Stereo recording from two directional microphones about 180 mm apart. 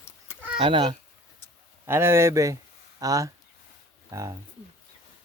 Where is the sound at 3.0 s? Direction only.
20° right (ahead or behind).